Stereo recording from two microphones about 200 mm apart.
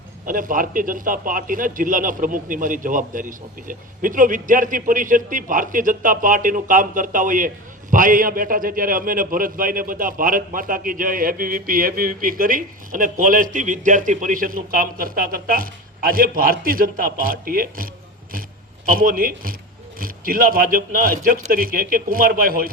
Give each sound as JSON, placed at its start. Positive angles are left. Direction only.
{"t": 0.3, "sound": "speech", "side_deg": -45}
{"t": 18.9, "sound": "speech", "side_deg": -45}